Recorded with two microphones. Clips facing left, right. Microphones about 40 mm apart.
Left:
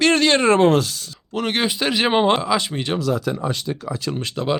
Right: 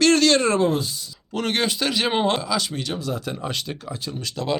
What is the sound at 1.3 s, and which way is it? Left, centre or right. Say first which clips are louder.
Speech: left 2 dB; centre.